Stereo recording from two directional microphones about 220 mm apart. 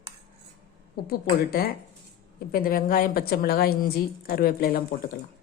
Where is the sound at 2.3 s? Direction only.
40° left (ahead or behind).